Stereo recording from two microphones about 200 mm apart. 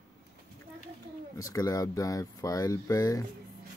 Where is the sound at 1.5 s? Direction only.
15° left (ahead or behind).